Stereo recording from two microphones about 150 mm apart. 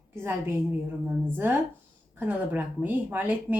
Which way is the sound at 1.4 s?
15° right (ahead or behind).